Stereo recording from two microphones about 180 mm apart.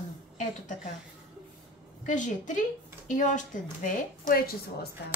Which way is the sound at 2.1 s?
45° left (ahead or behind).